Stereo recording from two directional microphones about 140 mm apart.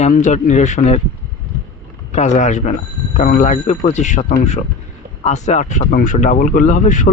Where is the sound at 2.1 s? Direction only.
60° left (ahead or behind).